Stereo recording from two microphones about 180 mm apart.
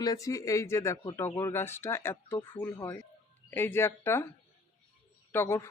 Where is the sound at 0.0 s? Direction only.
20° left (ahead or behind).